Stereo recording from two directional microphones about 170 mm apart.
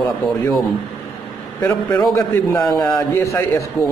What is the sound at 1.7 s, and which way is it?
Speech, 25° left (ahead or behind).